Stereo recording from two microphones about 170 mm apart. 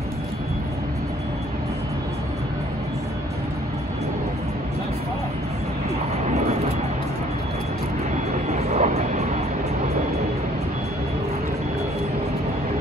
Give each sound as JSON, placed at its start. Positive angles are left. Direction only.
{"t": 8.5, "sound": "train", "side_deg": -40}